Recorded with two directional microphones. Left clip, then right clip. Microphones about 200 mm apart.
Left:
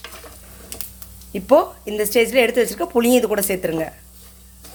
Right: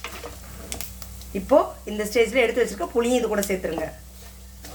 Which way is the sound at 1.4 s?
45° left (ahead or behind).